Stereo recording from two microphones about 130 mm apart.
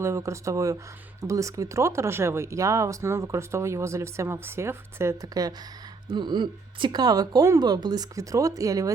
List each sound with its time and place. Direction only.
0.0 s speech: 20° right (ahead or behind)